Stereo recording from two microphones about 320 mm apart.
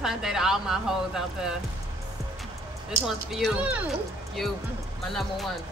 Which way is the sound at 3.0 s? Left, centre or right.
Centre.